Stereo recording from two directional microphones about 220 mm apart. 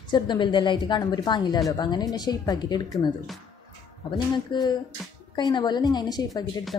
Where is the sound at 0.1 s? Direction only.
20° left (ahead or behind).